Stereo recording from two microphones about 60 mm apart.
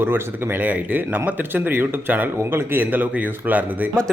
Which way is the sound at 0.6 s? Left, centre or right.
Right.